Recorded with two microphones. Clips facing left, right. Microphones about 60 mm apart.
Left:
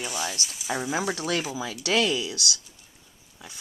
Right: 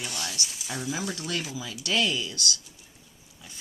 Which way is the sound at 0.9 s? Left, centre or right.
Left.